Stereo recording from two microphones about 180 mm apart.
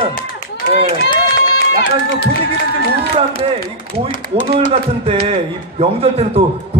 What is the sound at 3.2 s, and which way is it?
Speech, 35° right (ahead or behind).